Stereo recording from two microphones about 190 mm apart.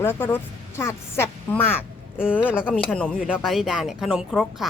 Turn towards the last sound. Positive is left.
turn(degrees=0)  # may be behind; listen again after turning